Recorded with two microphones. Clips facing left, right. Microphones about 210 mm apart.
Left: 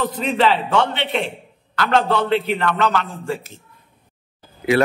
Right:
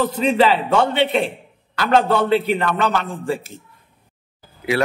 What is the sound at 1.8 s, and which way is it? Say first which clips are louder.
A man's voice: right 2 dB; 15° right (ahead or behind).